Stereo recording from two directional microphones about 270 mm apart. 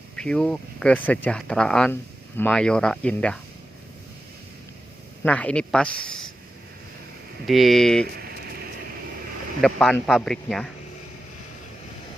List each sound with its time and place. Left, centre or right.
0.2 s speech: centre
5.2 s speech: centre
7.4 s speech: centre
8.0 s a sound: right
9.6 s speech: centre